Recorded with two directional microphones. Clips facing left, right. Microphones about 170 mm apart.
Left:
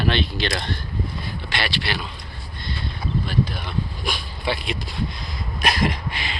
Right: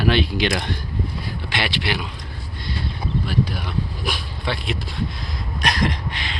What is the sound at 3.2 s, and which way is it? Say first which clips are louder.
Speech: right 2 dB; 10° right (ahead or behind).